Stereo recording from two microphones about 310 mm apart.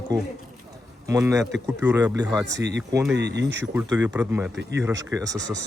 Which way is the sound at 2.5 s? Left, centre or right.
Right.